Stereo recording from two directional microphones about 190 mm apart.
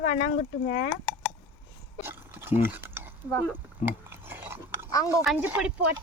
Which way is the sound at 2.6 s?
10° right (ahead or behind).